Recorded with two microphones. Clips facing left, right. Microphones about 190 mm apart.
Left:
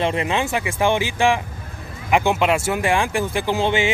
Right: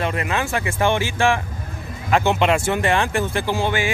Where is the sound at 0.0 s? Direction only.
25° left (ahead or behind).